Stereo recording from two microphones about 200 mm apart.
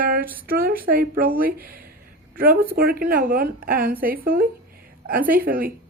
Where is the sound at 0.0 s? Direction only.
45° right (ahead or behind).